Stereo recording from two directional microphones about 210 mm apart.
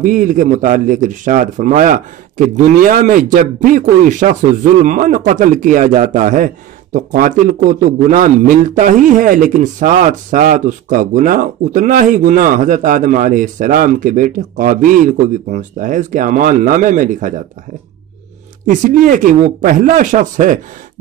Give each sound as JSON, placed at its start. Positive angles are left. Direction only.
{"t": 0.0, "sound": "a man's voice", "side_deg": -40}
{"t": 18.7, "sound": "a man's voice", "side_deg": -40}